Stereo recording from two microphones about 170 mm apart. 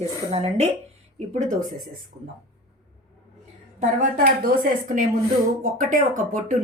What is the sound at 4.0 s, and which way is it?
A woman's voice, 55° right (ahead or behind).